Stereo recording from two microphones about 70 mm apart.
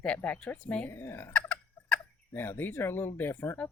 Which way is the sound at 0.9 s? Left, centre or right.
Left.